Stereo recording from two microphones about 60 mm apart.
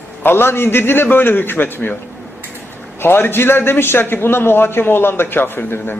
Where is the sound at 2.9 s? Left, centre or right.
Left.